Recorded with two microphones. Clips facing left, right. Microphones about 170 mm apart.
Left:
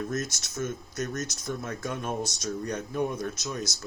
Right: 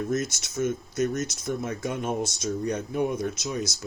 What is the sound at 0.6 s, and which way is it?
Speech, 20° right (ahead or behind).